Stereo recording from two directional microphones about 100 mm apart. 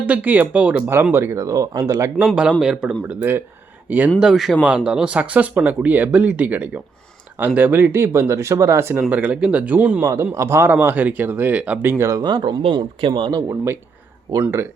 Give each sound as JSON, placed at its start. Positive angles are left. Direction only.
{"t": 0.0, "sound": "speech", "side_deg": -15}
{"t": 1.1, "sound": "speech", "side_deg": -25}
{"t": 2.3, "sound": "speech", "side_deg": -10}
{"t": 4.2, "sound": "speech", "side_deg": 0}
{"t": 9.0, "sound": "speech", "side_deg": -15}
{"t": 10.3, "sound": "speech", "side_deg": -25}
{"t": 12.2, "sound": "speech", "side_deg": -50}
{"t": 14.4, "sound": "speech", "side_deg": -25}